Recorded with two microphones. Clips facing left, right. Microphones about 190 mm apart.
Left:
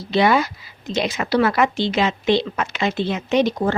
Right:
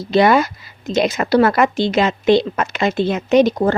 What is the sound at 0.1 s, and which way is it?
Speech, 45° right (ahead or behind).